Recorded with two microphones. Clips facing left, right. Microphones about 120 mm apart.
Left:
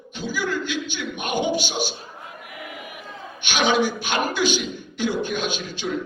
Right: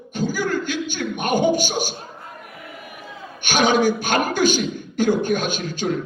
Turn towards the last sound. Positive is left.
turn(degrees=-45)  # may be behind; listen again after turning